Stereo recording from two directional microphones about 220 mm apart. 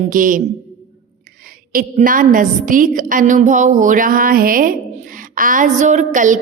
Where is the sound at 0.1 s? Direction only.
35° right (ahead or behind).